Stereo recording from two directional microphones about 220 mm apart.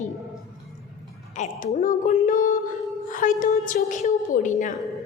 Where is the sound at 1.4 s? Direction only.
35° left (ahead or behind).